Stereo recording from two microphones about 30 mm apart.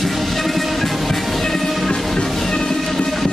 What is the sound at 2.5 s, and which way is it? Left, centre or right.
Music, left.